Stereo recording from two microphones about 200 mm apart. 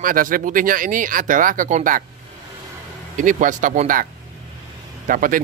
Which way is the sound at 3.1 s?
40° right (ahead or behind).